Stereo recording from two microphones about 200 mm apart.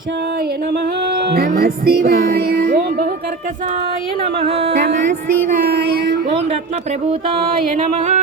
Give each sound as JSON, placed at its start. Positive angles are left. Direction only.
{"t": 1.3, "sound": "music", "side_deg": -50}
{"t": 4.2, "sound": "speech", "side_deg": -30}
{"t": 5.6, "sound": "music", "side_deg": -55}
{"t": 7.8, "sound": "a sound", "side_deg": -35}